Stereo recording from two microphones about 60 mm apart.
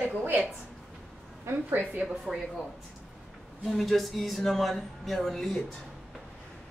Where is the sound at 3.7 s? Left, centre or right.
Centre.